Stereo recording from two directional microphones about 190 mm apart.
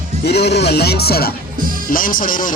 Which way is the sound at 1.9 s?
45° left (ahead or behind).